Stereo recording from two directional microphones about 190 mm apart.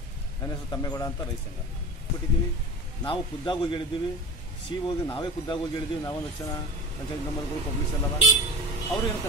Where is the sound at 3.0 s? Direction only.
25° left (ahead or behind).